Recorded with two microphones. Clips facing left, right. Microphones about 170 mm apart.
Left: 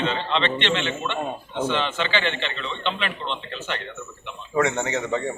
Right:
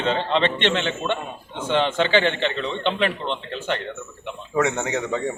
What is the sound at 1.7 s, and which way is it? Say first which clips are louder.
Speech: right 9 dB; 50° right (ahead or behind).